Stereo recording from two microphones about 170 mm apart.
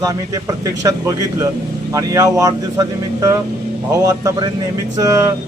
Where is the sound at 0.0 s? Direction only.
20° right (ahead or behind).